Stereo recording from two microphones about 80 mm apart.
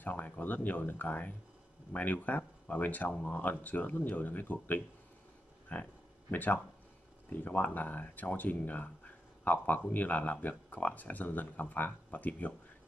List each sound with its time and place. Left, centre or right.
0.0 s speech: left